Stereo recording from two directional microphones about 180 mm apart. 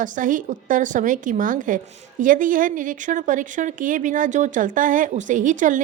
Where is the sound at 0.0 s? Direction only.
45° right (ahead or behind).